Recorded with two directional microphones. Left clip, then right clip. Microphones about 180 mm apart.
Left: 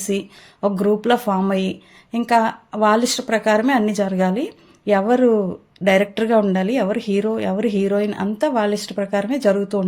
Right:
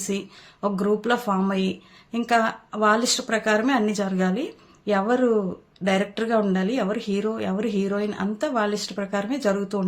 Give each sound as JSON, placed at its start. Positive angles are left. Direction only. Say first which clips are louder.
{"t": 0.1, "sound": "speech", "louder": "left 6 dB", "side_deg": 35}